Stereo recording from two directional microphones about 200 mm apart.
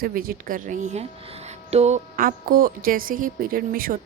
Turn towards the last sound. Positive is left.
turn(degrees=-45)  # may be behind; listen again after turning